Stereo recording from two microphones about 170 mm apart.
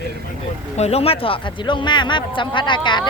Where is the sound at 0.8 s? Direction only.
40° left (ahead or behind).